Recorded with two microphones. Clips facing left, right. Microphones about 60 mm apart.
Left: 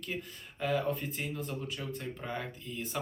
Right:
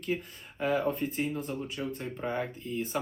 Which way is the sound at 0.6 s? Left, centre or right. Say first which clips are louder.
Right 3 dB; right.